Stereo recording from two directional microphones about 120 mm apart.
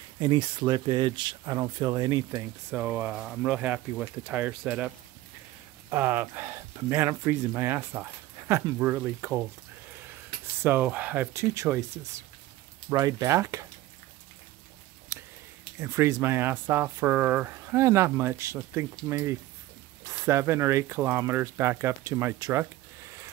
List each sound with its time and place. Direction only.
0.2 s speech: 40° right (ahead or behind)
2.7 s speech: 10° right (ahead or behind)
10.6 s speech: 15° right (ahead or behind)
15.8 s speech: 25° right (ahead or behind)